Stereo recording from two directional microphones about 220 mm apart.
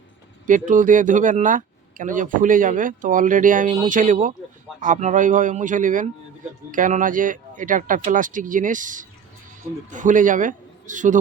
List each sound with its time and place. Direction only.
0.4 s speech: 35° right (ahead or behind)